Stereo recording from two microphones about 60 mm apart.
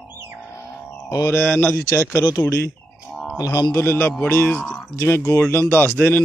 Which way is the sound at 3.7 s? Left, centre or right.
Left.